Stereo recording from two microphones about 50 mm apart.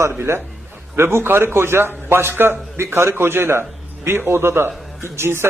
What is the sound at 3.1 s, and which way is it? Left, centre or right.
A man's voice, right.